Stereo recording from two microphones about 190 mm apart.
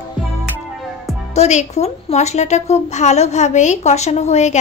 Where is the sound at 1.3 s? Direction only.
35° left (ahead or behind).